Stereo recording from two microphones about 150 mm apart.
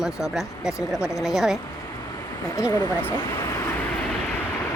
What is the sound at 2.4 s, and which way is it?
Speech, 20° left (ahead or behind).